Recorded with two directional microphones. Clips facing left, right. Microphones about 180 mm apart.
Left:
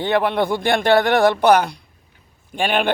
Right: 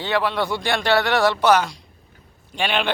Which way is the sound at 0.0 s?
55° left (ahead or behind).